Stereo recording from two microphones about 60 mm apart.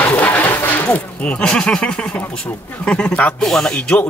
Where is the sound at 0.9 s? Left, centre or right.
Left.